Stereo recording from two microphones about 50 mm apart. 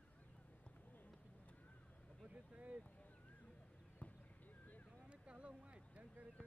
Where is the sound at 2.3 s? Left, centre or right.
Right.